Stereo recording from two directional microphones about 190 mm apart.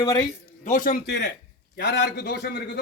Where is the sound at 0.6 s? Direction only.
45° left (ahead or behind).